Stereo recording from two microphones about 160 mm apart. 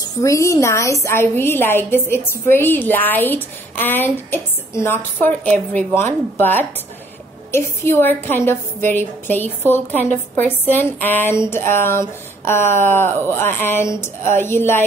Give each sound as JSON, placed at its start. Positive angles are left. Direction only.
{"t": 0.0, "sound": "a woman's voice", "side_deg": 20}